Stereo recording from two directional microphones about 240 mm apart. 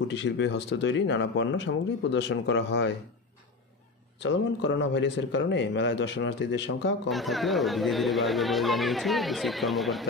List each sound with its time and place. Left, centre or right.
0.1 s speech: left
4.2 s speech: left
7.1 s speech: centre